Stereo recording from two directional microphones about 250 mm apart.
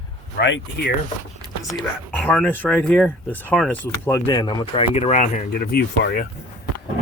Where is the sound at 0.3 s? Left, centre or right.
Left.